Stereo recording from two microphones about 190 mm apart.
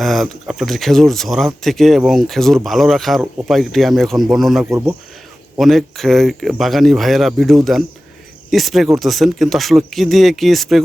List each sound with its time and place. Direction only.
0.0 s speech: centre (ahead or behind)
4.6 s speech: 15° right (ahead or behind)
5.5 s speech: centre (ahead or behind)